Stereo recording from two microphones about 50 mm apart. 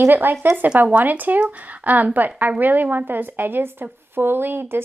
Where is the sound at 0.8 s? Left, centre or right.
Right.